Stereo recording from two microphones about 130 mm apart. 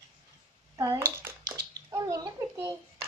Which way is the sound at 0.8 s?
25° right (ahead or behind).